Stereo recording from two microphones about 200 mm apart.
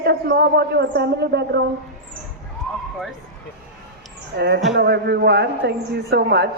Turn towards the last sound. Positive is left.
turn(degrees=-55)  # may be behind; listen again after turning